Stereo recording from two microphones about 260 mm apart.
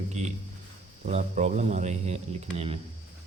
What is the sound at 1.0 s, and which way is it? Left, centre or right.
A man's voice, right.